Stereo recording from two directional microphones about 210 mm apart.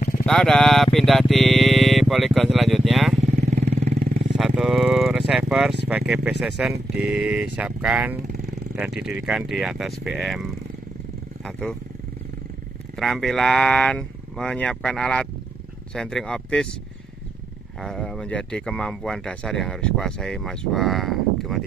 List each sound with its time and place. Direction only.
0.2 s speech: 5° left (ahead or behind)
3.4 s vehicle: 35° right (ahead or behind)
4.4 s speech: centre (ahead or behind)
12.9 s speech: centre (ahead or behind)
17.7 s speech: centre (ahead or behind)